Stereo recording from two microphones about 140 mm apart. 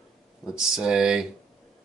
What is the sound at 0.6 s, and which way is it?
Speech, 5° right (ahead or behind).